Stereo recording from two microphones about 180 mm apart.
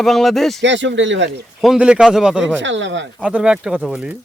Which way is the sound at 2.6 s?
90° right.